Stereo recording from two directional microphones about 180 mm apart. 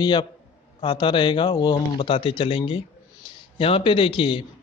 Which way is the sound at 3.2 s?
25° left (ahead or behind).